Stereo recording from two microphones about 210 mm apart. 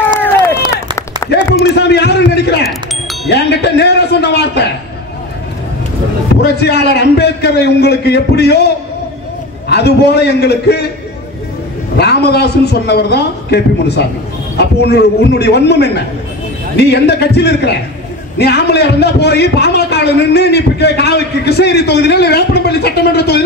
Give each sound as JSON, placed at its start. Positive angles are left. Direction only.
{"t": 1.3, "sound": "a man's voice", "side_deg": 50}
{"t": 6.4, "sound": "a man's voice", "side_deg": 50}
{"t": 12.0, "sound": "a man's voice", "side_deg": 50}